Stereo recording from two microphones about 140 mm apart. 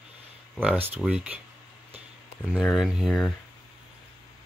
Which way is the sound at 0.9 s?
10° right (ahead or behind).